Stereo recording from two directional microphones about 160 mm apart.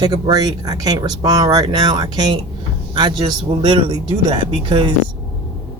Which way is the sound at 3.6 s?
30° right (ahead or behind).